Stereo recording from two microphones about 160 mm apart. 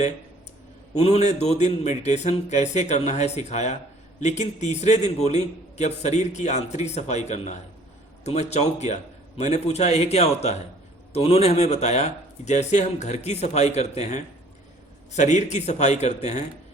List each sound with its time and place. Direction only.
0.9 s a man's voice: 40° left (ahead or behind)